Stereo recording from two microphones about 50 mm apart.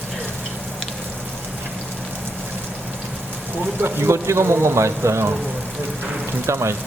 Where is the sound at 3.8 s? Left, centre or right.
Right.